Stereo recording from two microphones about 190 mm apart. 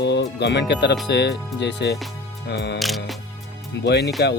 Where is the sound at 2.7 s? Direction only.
Centre (ahead or behind).